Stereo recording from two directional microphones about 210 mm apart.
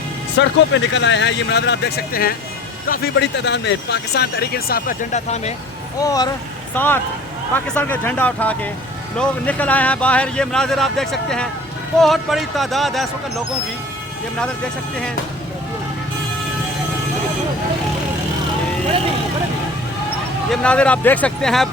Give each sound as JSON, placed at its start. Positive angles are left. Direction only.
{"t": 0.3, "sound": "speech", "side_deg": 60}
{"t": 6.0, "sound": "speech", "side_deg": 15}
{"t": 20.5, "sound": "speech", "side_deg": 5}